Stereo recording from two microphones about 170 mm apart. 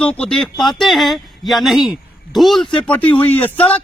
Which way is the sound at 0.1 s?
5° left (ahead or behind).